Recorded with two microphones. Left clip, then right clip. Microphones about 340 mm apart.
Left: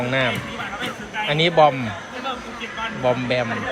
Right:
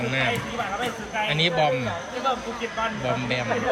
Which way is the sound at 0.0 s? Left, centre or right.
Centre.